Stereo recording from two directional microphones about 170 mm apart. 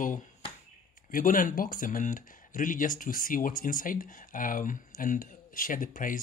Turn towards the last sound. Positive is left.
turn(degrees=50)  # may be behind; listen again after turning